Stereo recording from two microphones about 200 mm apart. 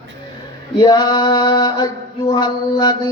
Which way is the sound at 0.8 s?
20° left (ahead or behind).